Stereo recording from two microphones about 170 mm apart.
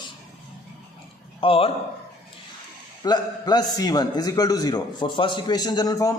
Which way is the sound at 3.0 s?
25° left (ahead or behind).